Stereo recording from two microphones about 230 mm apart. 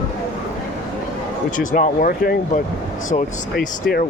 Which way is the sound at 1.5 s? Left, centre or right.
Left.